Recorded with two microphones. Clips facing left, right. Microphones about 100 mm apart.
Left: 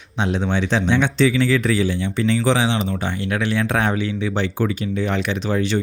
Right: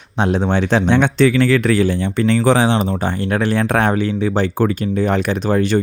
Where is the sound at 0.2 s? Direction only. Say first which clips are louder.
Right 4 dB; 45° right (ahead or behind).